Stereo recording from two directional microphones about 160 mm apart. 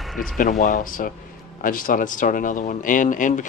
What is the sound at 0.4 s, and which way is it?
Speech, 55° left (ahead or behind).